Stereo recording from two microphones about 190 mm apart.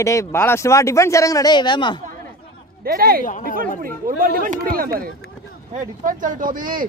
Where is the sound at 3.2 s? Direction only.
45° left (ahead or behind).